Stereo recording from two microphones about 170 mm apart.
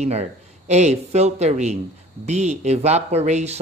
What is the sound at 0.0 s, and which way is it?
Speech, 40° right (ahead or behind).